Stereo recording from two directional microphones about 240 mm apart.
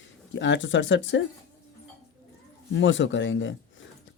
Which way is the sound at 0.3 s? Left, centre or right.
Left.